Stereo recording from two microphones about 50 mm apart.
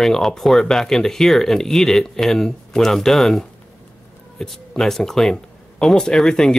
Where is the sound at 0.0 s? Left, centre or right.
Centre.